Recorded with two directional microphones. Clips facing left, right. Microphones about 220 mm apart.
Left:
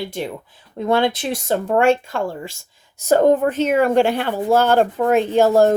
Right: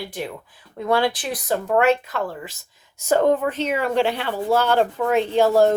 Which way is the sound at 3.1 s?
45° left (ahead or behind).